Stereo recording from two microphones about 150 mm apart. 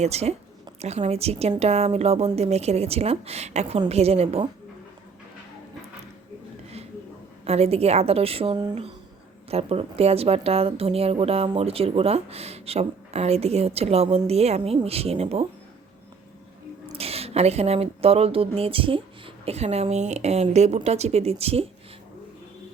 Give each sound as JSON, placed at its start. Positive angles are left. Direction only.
{"t": 0.0, "sound": "a woman's voice", "side_deg": -45}
{"t": 7.4, "sound": "a woman's voice", "side_deg": -45}
{"t": 17.0, "sound": "a woman's voice", "side_deg": -40}